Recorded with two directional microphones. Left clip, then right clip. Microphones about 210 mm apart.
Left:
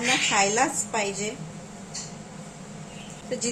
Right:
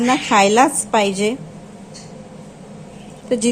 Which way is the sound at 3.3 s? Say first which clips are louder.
Right 12 dB; 40° right (ahead or behind).